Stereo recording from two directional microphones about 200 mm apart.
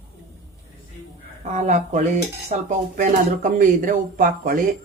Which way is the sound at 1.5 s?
40° right (ahead or behind).